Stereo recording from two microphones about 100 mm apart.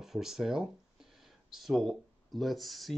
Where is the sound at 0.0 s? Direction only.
5° right (ahead or behind).